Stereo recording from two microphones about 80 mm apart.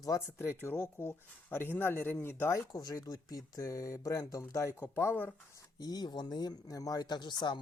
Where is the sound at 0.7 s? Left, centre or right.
Centre.